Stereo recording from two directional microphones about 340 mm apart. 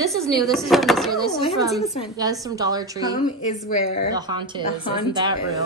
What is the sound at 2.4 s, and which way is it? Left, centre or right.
A woman's voice, centre.